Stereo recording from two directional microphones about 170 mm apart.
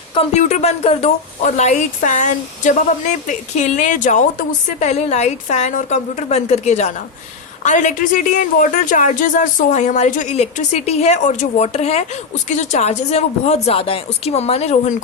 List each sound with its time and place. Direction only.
0.1 s a woman's voice: 35° left (ahead or behind)